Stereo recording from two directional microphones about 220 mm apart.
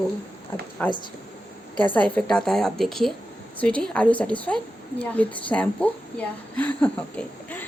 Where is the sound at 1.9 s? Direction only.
5° left (ahead or behind).